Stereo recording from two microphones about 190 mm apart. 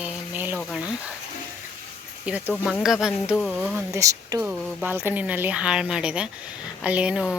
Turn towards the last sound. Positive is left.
turn(degrees=-5)  # may be behind; listen again after turning